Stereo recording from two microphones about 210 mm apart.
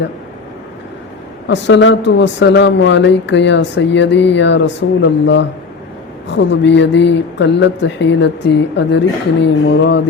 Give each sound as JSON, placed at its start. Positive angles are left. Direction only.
{"t": 1.5, "sound": "speech", "side_deg": 60}